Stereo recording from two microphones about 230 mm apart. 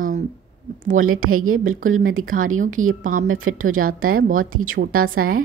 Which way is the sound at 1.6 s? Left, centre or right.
Right.